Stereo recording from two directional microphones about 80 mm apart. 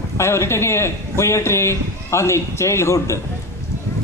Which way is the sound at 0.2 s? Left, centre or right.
Left.